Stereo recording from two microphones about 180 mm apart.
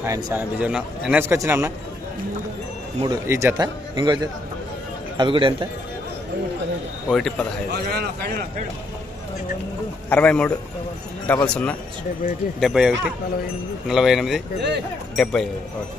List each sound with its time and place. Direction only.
0.0 s a man's voice: 15° right (ahead or behind)
0.6 s speech: 5° right (ahead or behind)
1.2 s a man's voice: 15° right (ahead or behind)
3.0 s a man's voice: 20° right (ahead or behind)
7.1 s speech: 5° left (ahead or behind)
7.7 s a man's voice: 60° right (ahead or behind)
10.1 s speech: 5° left (ahead or behind)